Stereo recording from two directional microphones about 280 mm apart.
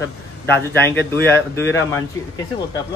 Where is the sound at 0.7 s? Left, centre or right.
Centre.